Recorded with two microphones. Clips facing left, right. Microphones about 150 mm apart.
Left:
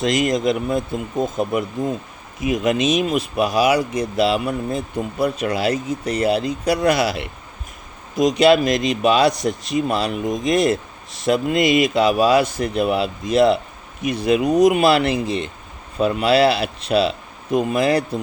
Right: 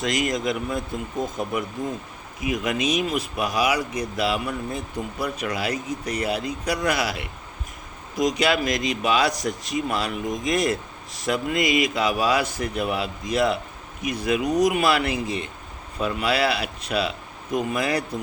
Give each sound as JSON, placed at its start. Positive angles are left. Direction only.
{"t": 0.0, "sound": "speech", "side_deg": 25}
{"t": 5.7, "sound": "speech", "side_deg": -20}
{"t": 6.2, "sound": "speech", "side_deg": 25}